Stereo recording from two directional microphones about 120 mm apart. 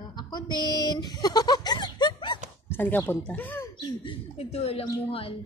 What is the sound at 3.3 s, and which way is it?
Speech, 15° left (ahead or behind).